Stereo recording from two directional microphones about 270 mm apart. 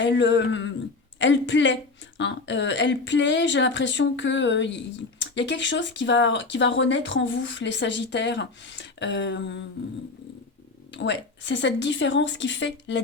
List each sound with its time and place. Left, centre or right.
0.0 s speech: left
10.9 s speech: left